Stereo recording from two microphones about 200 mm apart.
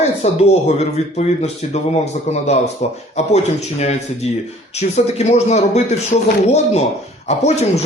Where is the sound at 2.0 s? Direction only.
35° left (ahead or behind).